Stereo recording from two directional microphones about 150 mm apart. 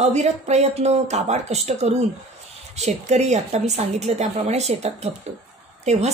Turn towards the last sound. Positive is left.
turn(degrees=-45)  # may be behind; listen again after turning